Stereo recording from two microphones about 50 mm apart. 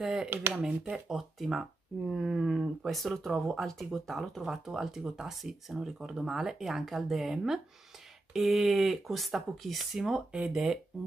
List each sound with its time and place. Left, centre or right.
0.0 s speech: centre